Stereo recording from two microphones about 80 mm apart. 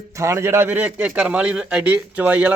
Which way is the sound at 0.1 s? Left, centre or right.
Right.